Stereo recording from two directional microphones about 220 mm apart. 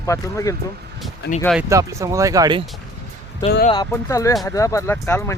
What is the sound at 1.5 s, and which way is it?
Speech, 15° right (ahead or behind).